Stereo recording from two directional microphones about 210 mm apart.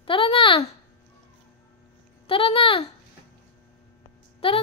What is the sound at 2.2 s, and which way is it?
Speech, 25° left (ahead or behind).